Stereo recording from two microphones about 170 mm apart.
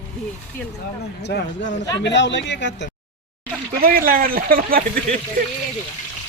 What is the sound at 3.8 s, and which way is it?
Speech, 60° right (ahead or behind).